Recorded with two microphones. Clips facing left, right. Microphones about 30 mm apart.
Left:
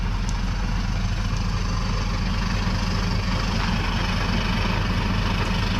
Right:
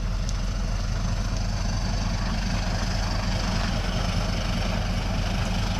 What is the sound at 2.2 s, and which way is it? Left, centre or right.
Vehicle, centre.